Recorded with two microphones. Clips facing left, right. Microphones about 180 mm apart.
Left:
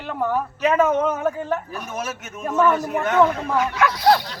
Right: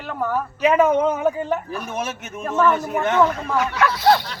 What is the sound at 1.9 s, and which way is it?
A man's voice, 30° right (ahead or behind).